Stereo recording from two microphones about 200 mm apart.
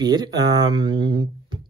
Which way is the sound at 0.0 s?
20° right (ahead or behind).